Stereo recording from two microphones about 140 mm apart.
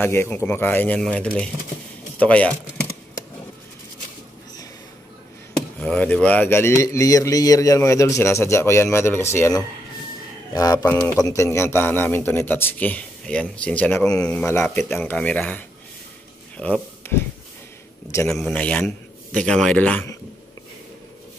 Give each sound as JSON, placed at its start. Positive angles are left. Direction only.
{"t": 0.0, "sound": "speech", "side_deg": 15}
{"t": 5.8, "sound": "speech", "side_deg": 10}
{"t": 10.9, "sound": "speech", "side_deg": 10}
{"t": 11.1, "sound": "speech", "side_deg": 25}
{"t": 18.3, "sound": "speech", "side_deg": 5}